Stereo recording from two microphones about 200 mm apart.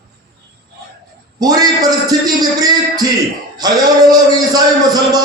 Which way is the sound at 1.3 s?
20° right (ahead or behind).